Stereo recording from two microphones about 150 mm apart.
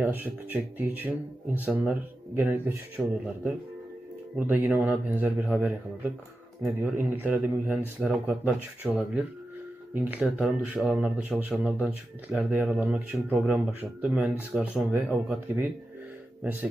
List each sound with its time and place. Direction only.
0.0 s a man's voice: 10° right (ahead or behind)